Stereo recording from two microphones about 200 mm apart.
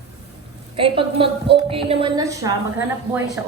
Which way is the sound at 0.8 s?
25° right (ahead or behind).